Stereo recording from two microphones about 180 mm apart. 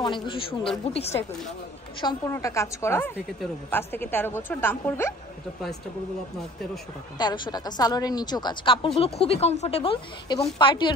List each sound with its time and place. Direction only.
0.0 s a woman's voice: 25° left (ahead or behind)
2.0 s a woman's voice: 20° left (ahead or behind)
7.2 s a woman's voice: 25° left (ahead or behind)